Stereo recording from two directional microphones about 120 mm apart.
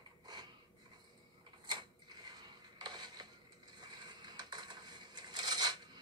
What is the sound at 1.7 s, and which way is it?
Mechanisms, 40° right (ahead or behind).